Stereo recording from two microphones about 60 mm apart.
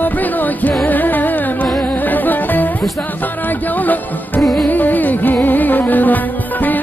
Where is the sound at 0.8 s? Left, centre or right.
Left.